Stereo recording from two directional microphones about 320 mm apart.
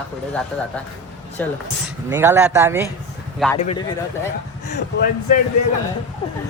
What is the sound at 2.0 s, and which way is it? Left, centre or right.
Speech, centre.